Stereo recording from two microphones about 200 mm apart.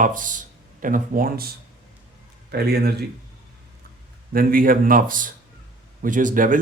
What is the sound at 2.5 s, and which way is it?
Speech, 50° right (ahead or behind).